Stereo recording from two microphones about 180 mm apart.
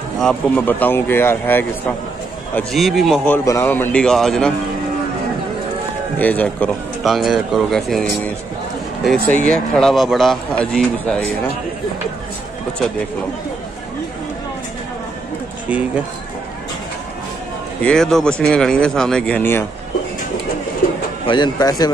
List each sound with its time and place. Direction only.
0.2 s speech: 5° left (ahead or behind)
2.5 s speech: centre (ahead or behind)
3.3 s speech: 15° left (ahead or behind)
6.1 s speech: 10° left (ahead or behind)
9.5 s speech: centre (ahead or behind)
15.7 s speech: 10° right (ahead or behind)
17.8 s speech: 5° left (ahead or behind)
21.3 s speech: 25° left (ahead or behind)